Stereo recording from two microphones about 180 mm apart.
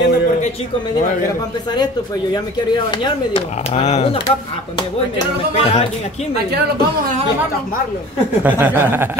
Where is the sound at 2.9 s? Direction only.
30° left (ahead or behind).